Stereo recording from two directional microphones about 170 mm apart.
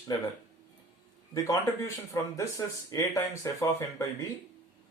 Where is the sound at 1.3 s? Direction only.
20° left (ahead or behind).